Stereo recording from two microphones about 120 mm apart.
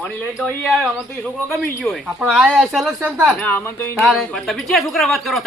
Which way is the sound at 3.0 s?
15° right (ahead or behind).